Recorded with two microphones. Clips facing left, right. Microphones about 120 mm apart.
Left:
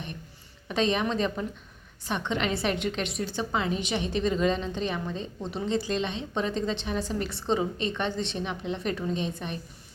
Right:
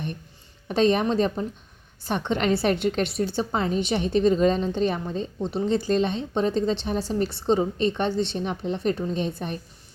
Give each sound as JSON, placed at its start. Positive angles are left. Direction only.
{"t": 0.7, "sound": "a woman's voice", "side_deg": -40}